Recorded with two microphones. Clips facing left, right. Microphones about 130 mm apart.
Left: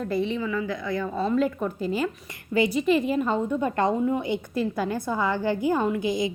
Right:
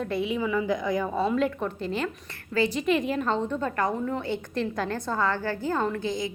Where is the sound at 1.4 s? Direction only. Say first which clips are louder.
Left 2 dB; centre (ahead or behind).